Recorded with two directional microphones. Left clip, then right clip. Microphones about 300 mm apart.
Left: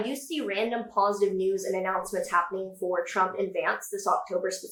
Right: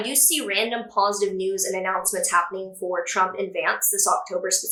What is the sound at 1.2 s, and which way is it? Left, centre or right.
A woman's voice, centre.